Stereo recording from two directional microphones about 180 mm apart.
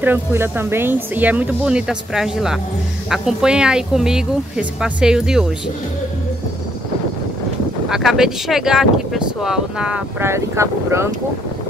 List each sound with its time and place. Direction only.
0.0 s speech: 10° right (ahead or behind)
7.9 s speech: centre (ahead or behind)